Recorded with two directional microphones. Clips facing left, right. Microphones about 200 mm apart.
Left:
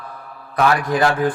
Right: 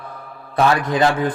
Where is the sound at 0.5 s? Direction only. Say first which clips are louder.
Even; 20° right (ahead or behind).